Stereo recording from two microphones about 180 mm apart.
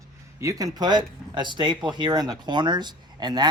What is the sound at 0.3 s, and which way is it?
Speech, 20° right (ahead or behind).